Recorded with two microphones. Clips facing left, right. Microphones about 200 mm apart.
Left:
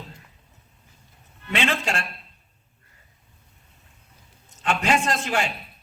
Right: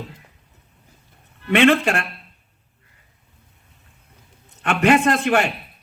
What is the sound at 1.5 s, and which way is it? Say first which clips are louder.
Speech: right 10 dB; 60° right (ahead or behind).